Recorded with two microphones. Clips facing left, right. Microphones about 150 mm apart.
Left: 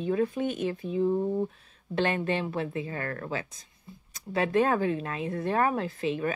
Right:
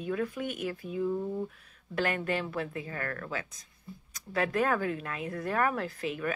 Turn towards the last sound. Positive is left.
turn(degrees=25)  # may be behind; listen again after turning